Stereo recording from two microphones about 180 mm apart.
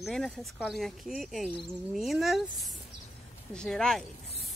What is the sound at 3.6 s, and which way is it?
Speech, 5° left (ahead or behind).